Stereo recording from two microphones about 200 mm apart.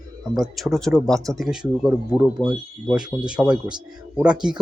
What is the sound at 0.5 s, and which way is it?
Speech, centre (ahead or behind).